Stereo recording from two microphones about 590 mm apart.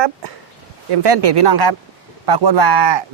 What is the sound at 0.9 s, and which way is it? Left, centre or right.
Speech, right.